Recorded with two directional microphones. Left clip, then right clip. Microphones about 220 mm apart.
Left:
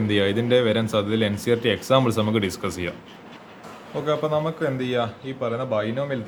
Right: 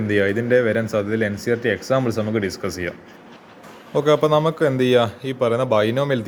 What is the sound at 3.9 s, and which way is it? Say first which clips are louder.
A man's voice: right 7 dB; 45° right (ahead or behind).